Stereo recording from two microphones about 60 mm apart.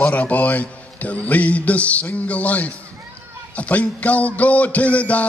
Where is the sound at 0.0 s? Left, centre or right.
Left.